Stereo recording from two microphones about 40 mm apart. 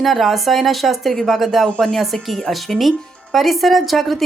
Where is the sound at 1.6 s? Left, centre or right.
Left.